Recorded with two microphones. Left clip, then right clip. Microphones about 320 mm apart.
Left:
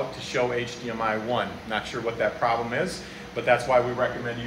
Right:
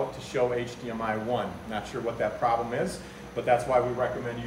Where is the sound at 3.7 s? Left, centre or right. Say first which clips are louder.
Left 4 dB; centre.